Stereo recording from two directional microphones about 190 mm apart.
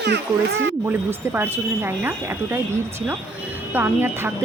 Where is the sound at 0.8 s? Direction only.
10° right (ahead or behind).